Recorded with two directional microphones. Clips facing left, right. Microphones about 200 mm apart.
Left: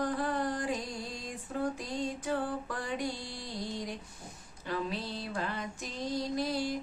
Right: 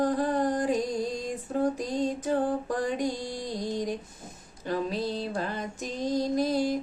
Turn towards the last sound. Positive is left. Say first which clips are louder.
# right 7 dB
turn(degrees=-45)  # may be behind; listen again after turning